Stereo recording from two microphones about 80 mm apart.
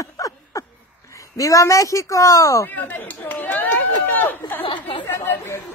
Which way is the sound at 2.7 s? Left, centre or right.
Left.